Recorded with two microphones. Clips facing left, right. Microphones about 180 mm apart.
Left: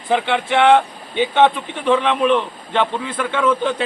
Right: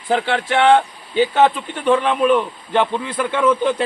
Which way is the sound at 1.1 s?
5° right (ahead or behind).